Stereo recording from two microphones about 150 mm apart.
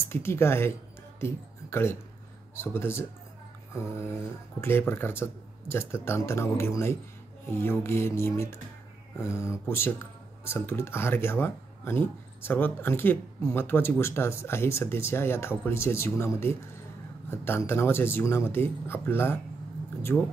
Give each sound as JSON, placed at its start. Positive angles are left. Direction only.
{"t": 0.1, "sound": "speech", "side_deg": 15}
{"t": 4.6, "sound": "speech", "side_deg": 15}